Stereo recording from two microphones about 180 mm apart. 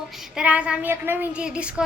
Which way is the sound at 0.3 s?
5° right (ahead or behind).